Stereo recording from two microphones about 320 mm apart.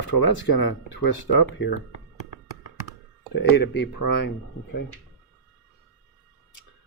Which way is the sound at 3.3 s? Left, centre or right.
Left.